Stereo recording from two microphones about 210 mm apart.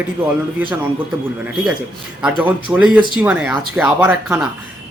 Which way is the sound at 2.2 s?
5° right (ahead or behind).